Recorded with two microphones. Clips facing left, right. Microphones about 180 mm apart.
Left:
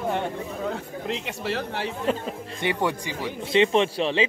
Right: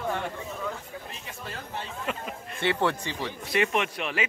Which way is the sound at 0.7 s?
75° left (ahead or behind).